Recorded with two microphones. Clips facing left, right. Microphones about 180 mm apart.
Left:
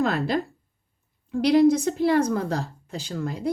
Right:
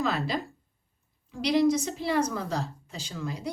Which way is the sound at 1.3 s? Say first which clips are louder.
Left 6 dB; 55° left (ahead or behind).